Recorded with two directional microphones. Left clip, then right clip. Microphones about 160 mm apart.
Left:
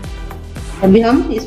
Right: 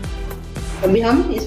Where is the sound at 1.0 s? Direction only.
80° left.